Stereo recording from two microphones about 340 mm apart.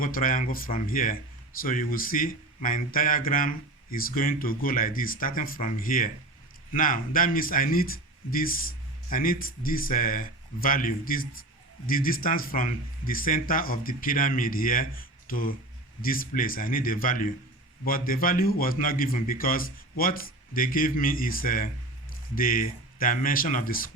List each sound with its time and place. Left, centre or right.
0.0 s speech: left